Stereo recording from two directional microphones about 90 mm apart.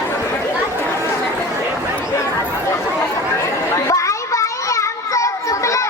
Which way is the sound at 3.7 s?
35° left (ahead or behind).